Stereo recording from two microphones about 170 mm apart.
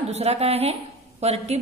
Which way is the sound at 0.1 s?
40° right (ahead or behind).